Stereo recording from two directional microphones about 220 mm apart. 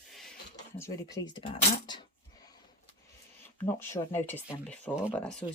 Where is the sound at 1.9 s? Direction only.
20° left (ahead or behind).